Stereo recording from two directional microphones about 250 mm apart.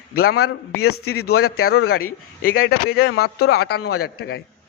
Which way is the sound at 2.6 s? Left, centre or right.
Left.